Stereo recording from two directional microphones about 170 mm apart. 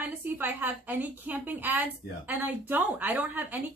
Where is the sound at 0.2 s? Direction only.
10° right (ahead or behind).